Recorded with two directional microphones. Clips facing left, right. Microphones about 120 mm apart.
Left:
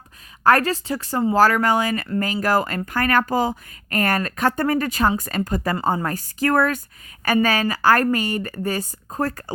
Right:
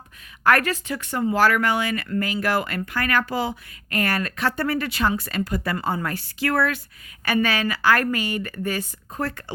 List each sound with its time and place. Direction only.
0.4 s a woman's voice: 35° left (ahead or behind)